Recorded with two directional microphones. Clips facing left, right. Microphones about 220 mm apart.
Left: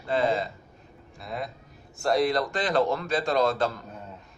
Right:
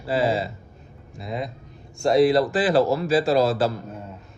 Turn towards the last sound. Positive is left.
turn(degrees=-5)  # may be behind; listen again after turning